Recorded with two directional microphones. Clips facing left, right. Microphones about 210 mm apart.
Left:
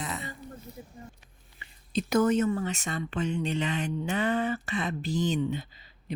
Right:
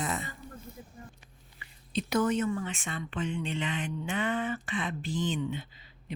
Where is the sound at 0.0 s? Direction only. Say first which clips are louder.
Right 2 dB; 45° right (ahead or behind).